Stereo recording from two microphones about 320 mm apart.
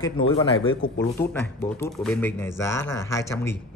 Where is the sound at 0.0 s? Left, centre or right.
Centre.